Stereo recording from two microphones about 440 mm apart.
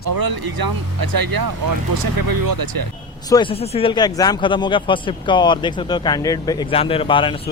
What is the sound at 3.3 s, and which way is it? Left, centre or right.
Speech, centre.